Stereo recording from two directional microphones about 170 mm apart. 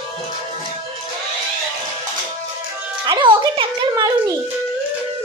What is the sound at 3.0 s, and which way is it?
Music, 30° right (ahead or behind).